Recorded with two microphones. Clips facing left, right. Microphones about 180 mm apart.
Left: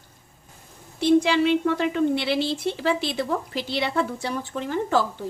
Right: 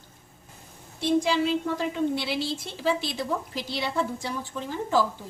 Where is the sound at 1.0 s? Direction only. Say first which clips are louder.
Left 5 dB; 70° left (ahead or behind).